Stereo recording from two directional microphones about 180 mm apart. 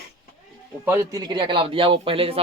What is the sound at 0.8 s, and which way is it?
A man's voice, 15° right (ahead or behind).